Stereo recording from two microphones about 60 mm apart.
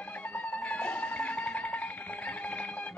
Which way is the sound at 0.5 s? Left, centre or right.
Left.